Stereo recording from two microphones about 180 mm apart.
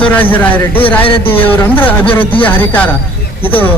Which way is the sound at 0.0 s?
10° left (ahead or behind).